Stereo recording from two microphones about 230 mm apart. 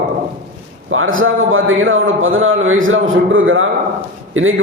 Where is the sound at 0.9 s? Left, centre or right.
Right.